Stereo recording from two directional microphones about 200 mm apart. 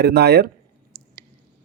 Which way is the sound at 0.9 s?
50° right (ahead or behind).